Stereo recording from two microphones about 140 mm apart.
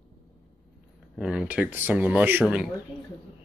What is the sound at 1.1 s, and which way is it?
Speech, 5° right (ahead or behind).